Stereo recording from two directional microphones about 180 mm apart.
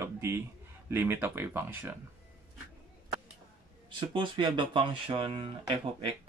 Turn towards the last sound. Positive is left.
turn(degrees=-30)  # may be behind; listen again after turning